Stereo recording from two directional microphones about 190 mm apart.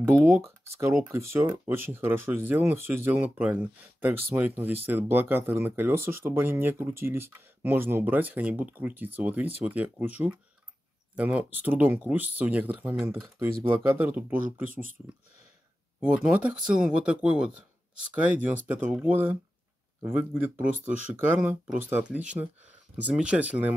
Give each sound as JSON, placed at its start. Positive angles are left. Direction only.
{"t": 0.2, "sound": "speech", "side_deg": -15}
{"t": 14.4, "sound": "speech", "side_deg": -45}
{"t": 16.0, "sound": "speech", "side_deg": -10}
{"t": 21.4, "sound": "speech", "side_deg": -5}